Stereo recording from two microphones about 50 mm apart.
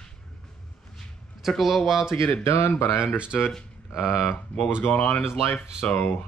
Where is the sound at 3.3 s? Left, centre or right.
Centre.